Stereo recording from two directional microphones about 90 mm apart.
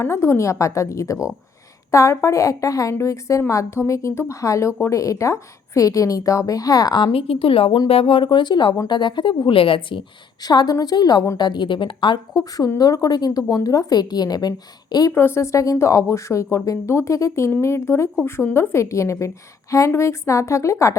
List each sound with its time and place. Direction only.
0.0 s a woman's voice: 30° left (ahead or behind); by 9.3 s 60° left (ahead or behind)
9.5 s a woman's voice: 80° left
10.4 s speech: 50° left (ahead or behind)
15.1 s a woman's voice: 25° left (ahead or behind)